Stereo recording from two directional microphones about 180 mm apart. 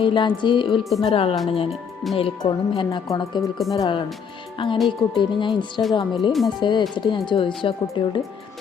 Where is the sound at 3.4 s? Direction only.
Centre (ahead or behind).